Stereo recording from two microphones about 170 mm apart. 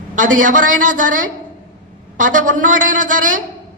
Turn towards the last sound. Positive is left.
turn(degrees=-50)  # may be behind; listen again after turning